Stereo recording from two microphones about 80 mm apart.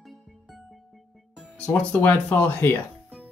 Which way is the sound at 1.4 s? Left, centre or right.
Centre.